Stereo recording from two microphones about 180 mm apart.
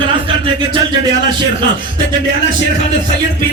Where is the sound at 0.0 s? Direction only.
30° right (ahead or behind).